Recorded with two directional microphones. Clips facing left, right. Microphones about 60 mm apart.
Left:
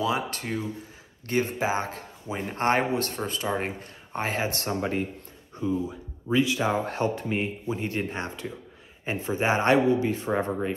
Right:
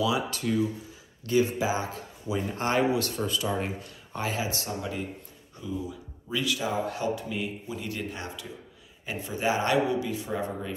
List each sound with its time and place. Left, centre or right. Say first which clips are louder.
0.0 s speech: even; left
5.6 s speech: left 6 dB; left
6.6 s speech: left 3 dB; left